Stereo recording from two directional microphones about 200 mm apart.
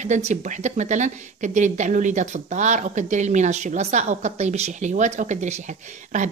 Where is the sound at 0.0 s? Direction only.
35° right (ahead or behind).